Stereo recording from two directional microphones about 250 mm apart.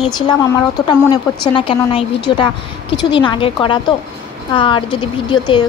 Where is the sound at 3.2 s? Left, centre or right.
Centre.